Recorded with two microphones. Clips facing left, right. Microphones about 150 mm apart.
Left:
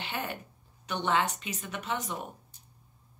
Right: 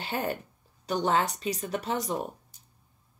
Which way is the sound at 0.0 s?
40° right (ahead or behind).